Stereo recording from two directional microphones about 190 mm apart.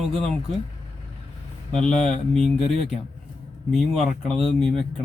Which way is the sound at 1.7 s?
5° left (ahead or behind).